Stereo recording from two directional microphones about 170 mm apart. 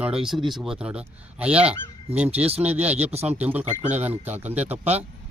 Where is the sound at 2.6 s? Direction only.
10° right (ahead or behind).